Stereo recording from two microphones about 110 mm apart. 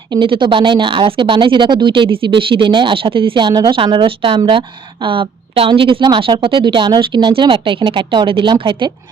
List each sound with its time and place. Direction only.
0.1 s speech: 45° right (ahead or behind)